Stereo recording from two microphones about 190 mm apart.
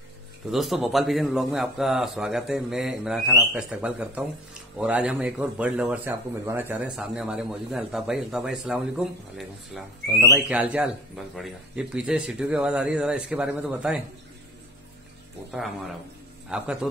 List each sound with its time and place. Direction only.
0.5 s speech: centre (ahead or behind)
16.4 s a man's voice: 5° right (ahead or behind)